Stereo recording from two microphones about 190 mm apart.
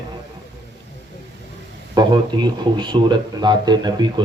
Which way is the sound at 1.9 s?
20° right (ahead or behind).